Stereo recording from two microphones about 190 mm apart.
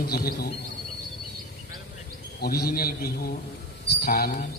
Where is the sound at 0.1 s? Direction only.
55° left (ahead or behind).